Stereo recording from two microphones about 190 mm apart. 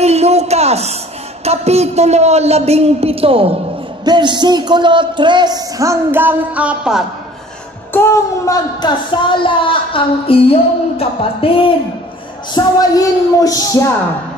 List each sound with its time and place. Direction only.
0.0 s a man's voice: 35° right (ahead or behind)
4.0 s a sound: 25° right (ahead or behind); by 7.1 s 5° right (ahead or behind)
7.9 s speech: 15° left (ahead or behind)
12.5 s speech: 20° left (ahead or behind)